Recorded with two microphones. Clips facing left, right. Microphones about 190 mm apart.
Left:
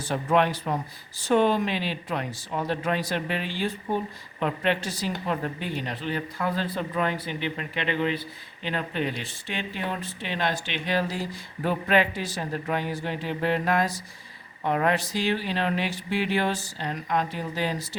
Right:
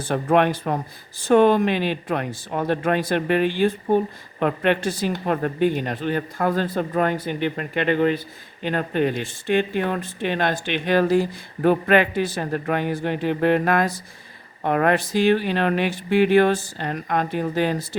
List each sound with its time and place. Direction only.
0.0 s speech: 55° right (ahead or behind)